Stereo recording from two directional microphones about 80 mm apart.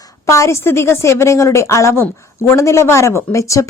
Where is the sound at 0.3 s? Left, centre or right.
Left.